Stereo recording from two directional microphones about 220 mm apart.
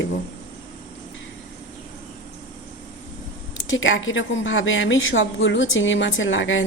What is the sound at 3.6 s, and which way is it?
A woman's voice, 60° left (ahead or behind).